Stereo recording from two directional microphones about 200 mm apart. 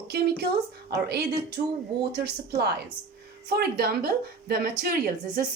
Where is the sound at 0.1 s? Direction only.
50° right (ahead or behind).